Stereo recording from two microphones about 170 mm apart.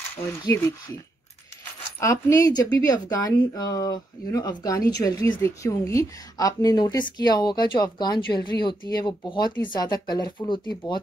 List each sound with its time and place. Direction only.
0.4 s speech: 20° left (ahead or behind)
2.0 s speech: 15° left (ahead or behind)